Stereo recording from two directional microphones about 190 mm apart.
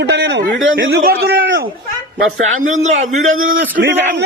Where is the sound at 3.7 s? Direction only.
60° right (ahead or behind).